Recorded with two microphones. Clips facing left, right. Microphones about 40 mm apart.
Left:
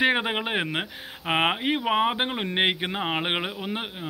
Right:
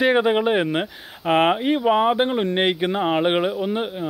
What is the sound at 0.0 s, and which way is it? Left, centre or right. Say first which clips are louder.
Speech: right 6 dB; centre.